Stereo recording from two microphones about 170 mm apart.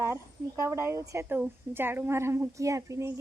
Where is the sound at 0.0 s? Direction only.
15° right (ahead or behind).